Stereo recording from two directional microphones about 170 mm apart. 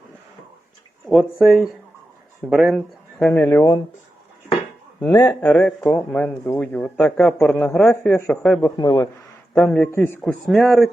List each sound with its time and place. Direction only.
1.0 s a man's voice: centre (ahead or behind)
3.2 s a man's voice: 10° left (ahead or behind)
4.9 s a man's voice: 10° left (ahead or behind)
8.7 s a man's voice: 25° left (ahead or behind)
9.6 s a man's voice: 5° left (ahead or behind)
10.2 s a man's voice: centre (ahead or behind)